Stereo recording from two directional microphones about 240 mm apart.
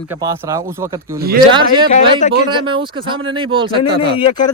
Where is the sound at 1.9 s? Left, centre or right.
Left.